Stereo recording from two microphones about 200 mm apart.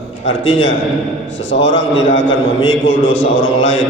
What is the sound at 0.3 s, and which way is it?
A man's voice, 70° left (ahead or behind).